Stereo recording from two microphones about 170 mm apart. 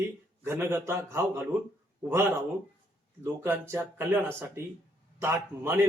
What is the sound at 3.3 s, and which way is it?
Speech, 15° right (ahead or behind).